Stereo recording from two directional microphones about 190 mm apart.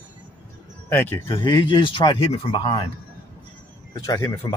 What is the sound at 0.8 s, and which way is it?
Speech, 10° left (ahead or behind).